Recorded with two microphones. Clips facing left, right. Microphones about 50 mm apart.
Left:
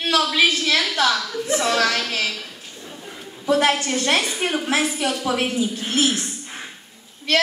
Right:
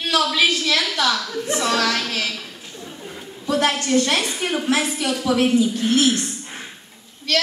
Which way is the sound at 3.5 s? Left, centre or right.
Centre.